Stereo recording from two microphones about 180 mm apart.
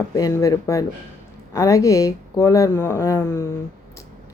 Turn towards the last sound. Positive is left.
turn(degrees=15)  # may be behind; listen again after turning